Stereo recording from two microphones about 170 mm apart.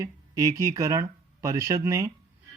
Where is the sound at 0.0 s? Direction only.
20° right (ahead or behind).